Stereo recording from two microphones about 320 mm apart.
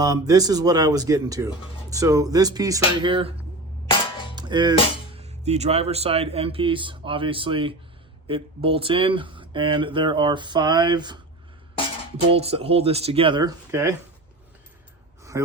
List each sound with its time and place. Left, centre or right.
0.0 s speech: centre
3.8 s music: centre
4.4 s music: centre
5.1 s speech: centre
12.3 s speech: centre